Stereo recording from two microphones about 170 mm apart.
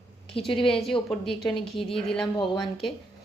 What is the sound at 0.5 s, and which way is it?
Speech, 30° left (ahead or behind).